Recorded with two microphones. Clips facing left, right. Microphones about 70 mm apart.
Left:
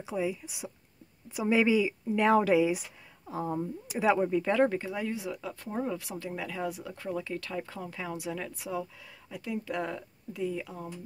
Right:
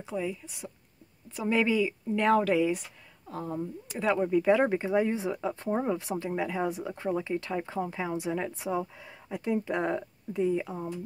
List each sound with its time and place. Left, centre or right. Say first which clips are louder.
0.0 s speech: left 1 dB; centre; by 10.9 s right